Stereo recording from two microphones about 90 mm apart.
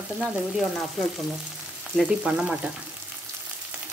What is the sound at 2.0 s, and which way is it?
Stir, 10° right (ahead or behind).